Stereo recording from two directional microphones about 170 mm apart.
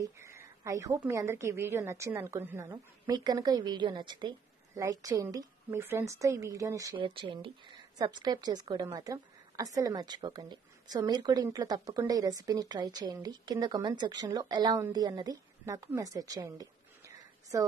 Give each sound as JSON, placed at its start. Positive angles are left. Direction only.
{"t": 0.0, "sound": "a woman's voice", "side_deg": -15}
{"t": 7.0, "sound": "a woman's voice", "side_deg": -30}